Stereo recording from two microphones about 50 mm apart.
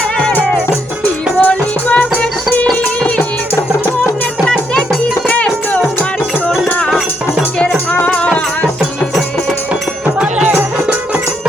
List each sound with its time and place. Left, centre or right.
1.4 s music: left
5.3 s music: left
8.0 s music: left